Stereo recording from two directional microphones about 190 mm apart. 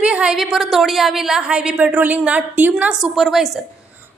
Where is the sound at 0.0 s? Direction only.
5° right (ahead or behind).